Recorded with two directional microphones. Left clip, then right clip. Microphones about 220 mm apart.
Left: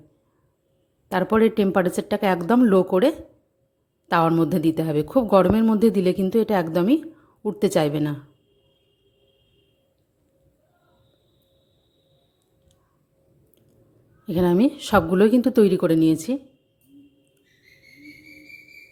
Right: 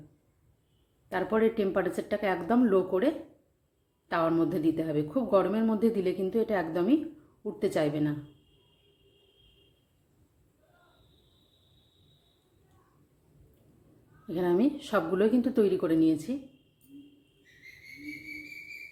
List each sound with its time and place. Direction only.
1.0 s a woman's voice: 50° left (ahead or behind)
14.3 s a woman's voice: 50° left (ahead or behind)